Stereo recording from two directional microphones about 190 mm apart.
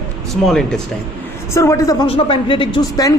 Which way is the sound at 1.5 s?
15° left (ahead or behind).